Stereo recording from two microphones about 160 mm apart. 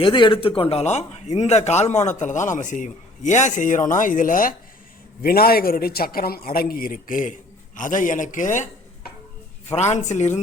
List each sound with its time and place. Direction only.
0.0 s speech: 30° left (ahead or behind); by 4.5 s 60° left (ahead or behind)
5.2 s a man's voice: 70° left (ahead or behind); by 10.4 s 45° left (ahead or behind)